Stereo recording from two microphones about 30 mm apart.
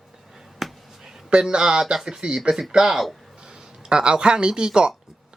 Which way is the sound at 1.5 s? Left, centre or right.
Right.